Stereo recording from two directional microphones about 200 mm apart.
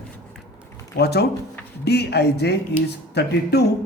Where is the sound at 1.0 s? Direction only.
55° left (ahead or behind).